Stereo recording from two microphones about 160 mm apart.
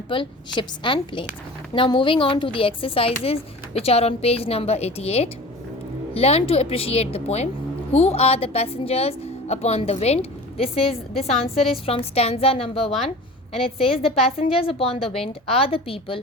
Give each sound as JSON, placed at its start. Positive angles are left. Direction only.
{"t": 0.1, "sound": "a woman's voice", "side_deg": 30}